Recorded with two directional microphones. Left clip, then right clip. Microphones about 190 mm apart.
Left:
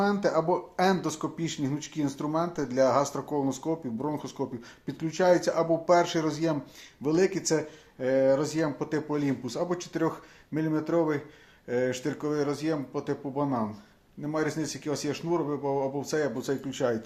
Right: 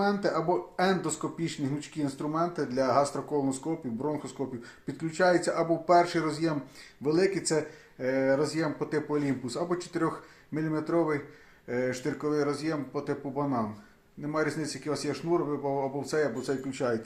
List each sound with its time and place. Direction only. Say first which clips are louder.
0.0 s speech: left 2 dB; 40° left (ahead or behind)